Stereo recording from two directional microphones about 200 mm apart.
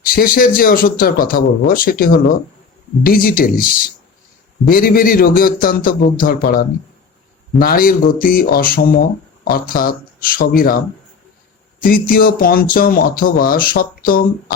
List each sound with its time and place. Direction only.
0.0 s speech: 45° left (ahead or behind)